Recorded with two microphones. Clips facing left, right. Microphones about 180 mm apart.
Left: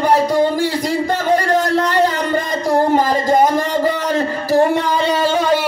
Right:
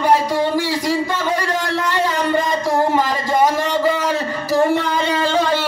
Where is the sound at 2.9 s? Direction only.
50° left (ahead or behind).